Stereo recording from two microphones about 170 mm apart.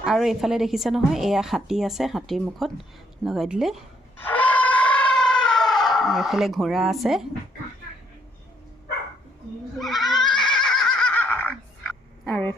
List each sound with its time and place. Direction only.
0.0 s a woman's voice: centre (ahead or behind)
4.3 s a sound: 10° left (ahead or behind)
9.8 s neigh: centre (ahead or behind)